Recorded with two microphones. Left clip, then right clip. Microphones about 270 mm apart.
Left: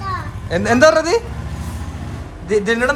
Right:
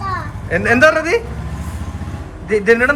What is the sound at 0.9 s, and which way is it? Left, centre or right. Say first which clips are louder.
Speech: even; left.